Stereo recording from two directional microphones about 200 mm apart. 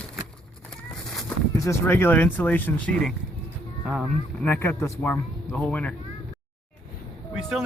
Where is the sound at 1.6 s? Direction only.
15° left (ahead or behind).